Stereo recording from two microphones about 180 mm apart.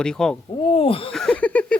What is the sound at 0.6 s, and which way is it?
Speech, 30° left (ahead or behind).